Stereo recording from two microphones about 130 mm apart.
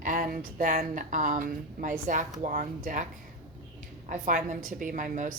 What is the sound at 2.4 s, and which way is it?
Chopping, 85° right.